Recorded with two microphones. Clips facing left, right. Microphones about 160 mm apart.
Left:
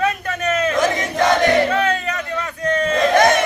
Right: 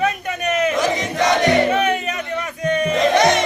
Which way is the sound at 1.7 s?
20° right (ahead or behind).